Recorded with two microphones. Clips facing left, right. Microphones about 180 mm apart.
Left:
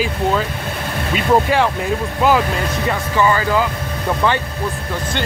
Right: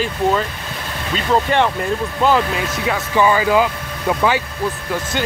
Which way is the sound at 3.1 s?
15° right (ahead or behind).